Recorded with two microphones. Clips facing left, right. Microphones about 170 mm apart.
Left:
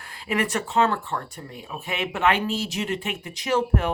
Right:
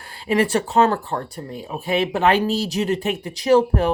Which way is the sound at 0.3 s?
30° right (ahead or behind).